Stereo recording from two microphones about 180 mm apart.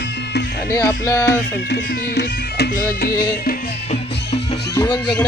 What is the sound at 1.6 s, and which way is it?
Speech, 70° left (ahead or behind).